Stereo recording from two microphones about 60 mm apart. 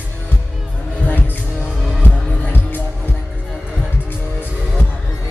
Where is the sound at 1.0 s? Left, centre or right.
Left.